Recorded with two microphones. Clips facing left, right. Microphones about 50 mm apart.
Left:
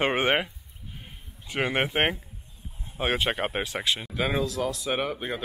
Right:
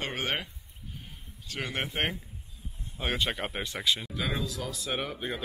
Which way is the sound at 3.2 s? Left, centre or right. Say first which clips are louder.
Left 5 dB; left.